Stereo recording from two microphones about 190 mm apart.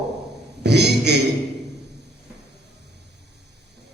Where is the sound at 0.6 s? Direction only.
60° right (ahead or behind).